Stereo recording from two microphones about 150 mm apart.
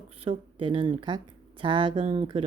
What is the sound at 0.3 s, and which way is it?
Speech, 35° right (ahead or behind).